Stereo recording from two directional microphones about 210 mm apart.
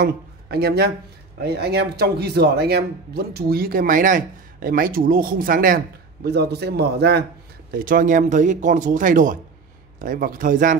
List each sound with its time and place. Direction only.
0.0 s a man's voice: 50° right (ahead or behind)